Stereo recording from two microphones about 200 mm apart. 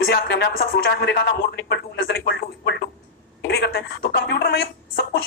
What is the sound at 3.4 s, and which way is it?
A woman's voice, 55° left (ahead or behind).